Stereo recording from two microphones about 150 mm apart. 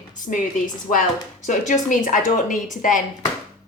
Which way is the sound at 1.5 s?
55° left (ahead or behind).